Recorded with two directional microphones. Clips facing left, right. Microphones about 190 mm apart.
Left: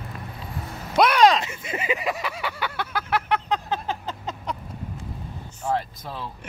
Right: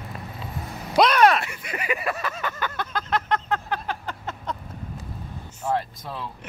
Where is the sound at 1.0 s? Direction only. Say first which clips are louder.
Even; 10° left (ahead or behind).